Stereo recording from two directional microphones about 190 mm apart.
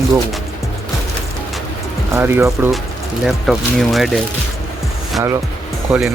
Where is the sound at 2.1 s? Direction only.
15° right (ahead or behind).